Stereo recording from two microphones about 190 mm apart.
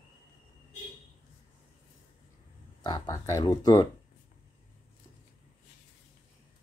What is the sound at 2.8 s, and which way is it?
Speech, 20° left (ahead or behind).